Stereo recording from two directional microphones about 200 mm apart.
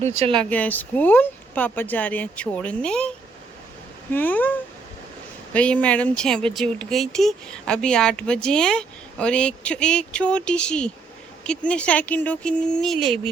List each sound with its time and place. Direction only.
0.0 s speech: 35° right (ahead or behind)
0.3 s speech: 5° left (ahead or behind)
4.1 s speech: 10° left (ahead or behind)